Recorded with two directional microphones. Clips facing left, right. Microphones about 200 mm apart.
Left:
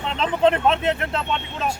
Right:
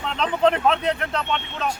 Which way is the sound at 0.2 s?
Centre (ahead or behind).